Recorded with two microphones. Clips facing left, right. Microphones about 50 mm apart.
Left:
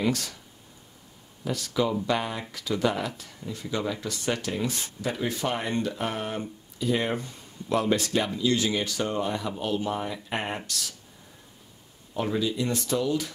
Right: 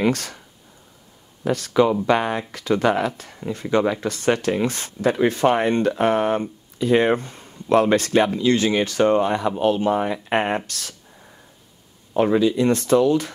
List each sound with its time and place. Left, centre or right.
0.0 s speech: right
1.4 s speech: right
10.7 s speech: right
12.2 s speech: right